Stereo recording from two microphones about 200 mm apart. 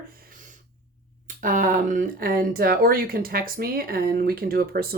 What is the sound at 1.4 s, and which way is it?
Speech, 40° right (ahead or behind).